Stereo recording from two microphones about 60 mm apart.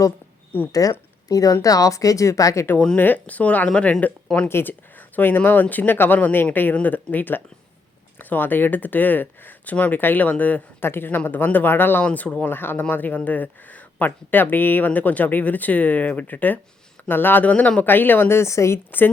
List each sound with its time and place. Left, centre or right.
0.7 s a woman's voice: left
3.0 s speech: left
4.4 s speech: left
10.8 s speech: left
12.0 s speech: left